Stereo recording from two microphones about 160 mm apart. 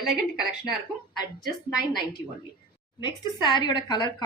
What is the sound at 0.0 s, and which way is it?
Speech, centre (ahead or behind).